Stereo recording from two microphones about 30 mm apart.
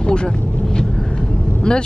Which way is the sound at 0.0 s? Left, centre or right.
Left.